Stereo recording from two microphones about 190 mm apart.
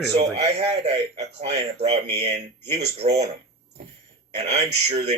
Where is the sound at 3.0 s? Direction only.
35° right (ahead or behind).